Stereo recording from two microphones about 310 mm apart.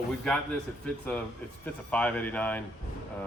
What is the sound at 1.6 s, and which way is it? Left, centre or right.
Speech, centre.